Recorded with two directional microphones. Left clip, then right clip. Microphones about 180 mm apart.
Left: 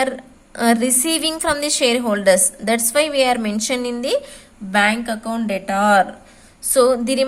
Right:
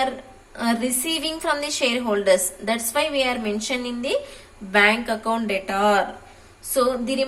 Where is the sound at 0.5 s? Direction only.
55° left (ahead or behind).